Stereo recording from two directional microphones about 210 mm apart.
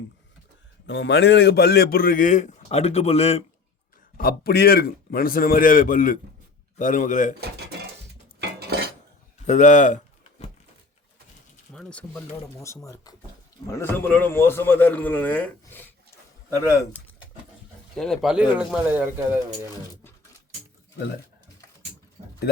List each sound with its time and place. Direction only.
0.9 s a man's voice: 55° left (ahead or behind); by 3.4 s 30° left (ahead or behind)
4.2 s a man's voice: 45° left (ahead or behind)
7.4 s speech: 50° right (ahead or behind)
8.4 s cutlery: 50° right (ahead or behind)
9.5 s speech: 35° left (ahead or behind)
11.7 s a man's voice: 5° left (ahead or behind)
17.9 s speech: centre (ahead or behind)
22.2 s a sound: 25° right (ahead or behind)